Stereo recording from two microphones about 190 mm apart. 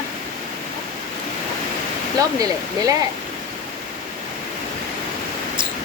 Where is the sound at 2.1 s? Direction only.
20° right (ahead or behind).